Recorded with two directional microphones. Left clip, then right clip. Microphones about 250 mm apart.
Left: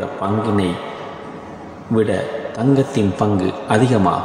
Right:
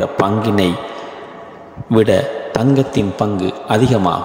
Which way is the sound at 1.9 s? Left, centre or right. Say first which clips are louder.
Right 5 dB; right.